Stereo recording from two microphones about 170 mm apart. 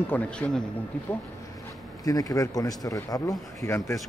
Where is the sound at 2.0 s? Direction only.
20° left (ahead or behind).